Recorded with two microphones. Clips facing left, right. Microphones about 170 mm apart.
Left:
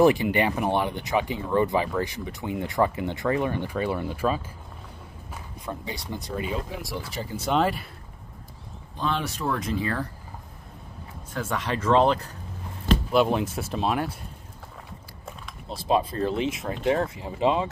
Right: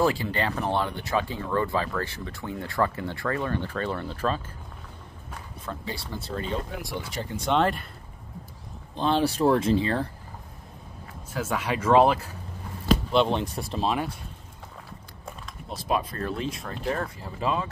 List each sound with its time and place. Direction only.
0.0 s speech: 20° left (ahead or behind)
5.7 s speech: 15° left (ahead or behind)
8.9 s speech: 30° right (ahead or behind)
11.3 s speech: 10° right (ahead or behind)
12.8 s speech: 5° left (ahead or behind)
15.7 s speech: 30° left (ahead or behind)